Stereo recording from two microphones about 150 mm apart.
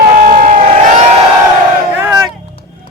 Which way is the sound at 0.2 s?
65° right (ahead or behind).